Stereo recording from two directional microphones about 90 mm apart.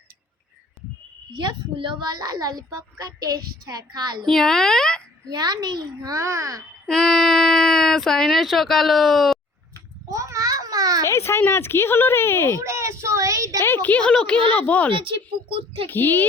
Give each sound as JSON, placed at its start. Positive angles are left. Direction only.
{"t": 1.4, "sound": "a child's voice", "side_deg": -65}
{"t": 4.3, "sound": "speech", "side_deg": 5}
{"t": 5.3, "sound": "a child's voice", "side_deg": -45}
{"t": 6.8, "sound": "speech", "side_deg": 10}
{"t": 10.1, "sound": "a sound", "side_deg": -35}
{"t": 11.0, "sound": "speech", "side_deg": 30}
{"t": 12.5, "sound": "a sound", "side_deg": -30}
{"t": 13.6, "sound": "speech", "side_deg": 25}
{"t": 14.9, "sound": "speech", "side_deg": -70}
{"t": 15.9, "sound": "speech", "side_deg": 20}